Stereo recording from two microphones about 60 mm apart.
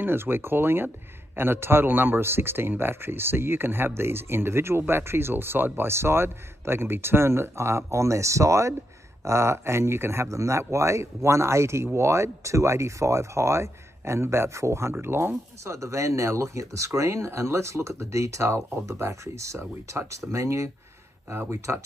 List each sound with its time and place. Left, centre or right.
0.0 s a man's voice: right
21.3 s speech: right